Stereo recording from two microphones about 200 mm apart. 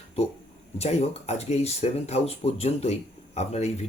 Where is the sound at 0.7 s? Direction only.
30° left (ahead or behind).